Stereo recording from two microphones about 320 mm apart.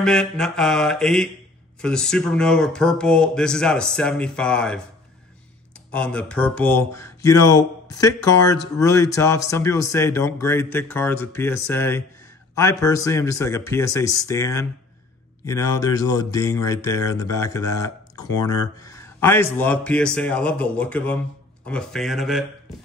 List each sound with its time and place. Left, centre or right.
0.0 s speech: centre
5.9 s speech: centre